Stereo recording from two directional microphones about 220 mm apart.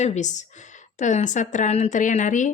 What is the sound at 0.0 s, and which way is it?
A woman's voice, 30° left (ahead or behind).